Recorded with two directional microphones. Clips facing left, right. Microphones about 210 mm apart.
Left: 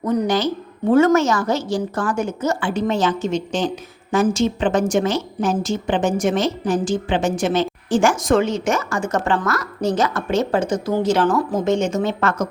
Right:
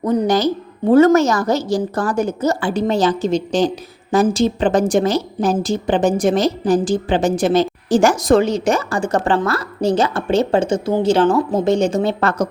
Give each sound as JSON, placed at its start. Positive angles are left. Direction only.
{"t": 0.0, "sound": "a woman's voice", "side_deg": -35}